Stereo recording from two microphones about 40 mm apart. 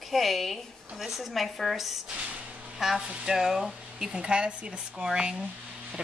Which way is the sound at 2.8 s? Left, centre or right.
Centre.